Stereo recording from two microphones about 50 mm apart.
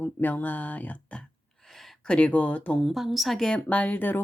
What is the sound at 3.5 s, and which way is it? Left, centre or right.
Speech, left.